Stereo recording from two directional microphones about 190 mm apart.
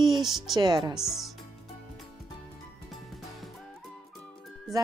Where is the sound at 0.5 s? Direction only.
20° right (ahead or behind).